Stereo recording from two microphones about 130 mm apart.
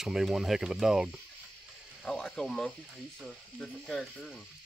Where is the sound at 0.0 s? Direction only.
5° right (ahead or behind).